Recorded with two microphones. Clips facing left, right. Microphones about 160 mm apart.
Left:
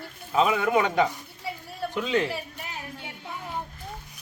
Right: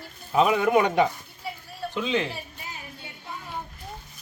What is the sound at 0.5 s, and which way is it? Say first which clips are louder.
Speech: right 2 dB; 20° right (ahead or behind).